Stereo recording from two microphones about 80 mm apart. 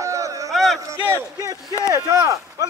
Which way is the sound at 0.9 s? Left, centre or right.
Right.